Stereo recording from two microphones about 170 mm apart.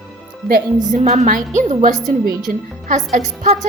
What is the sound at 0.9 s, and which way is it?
A woman's voice, 45° right (ahead or behind).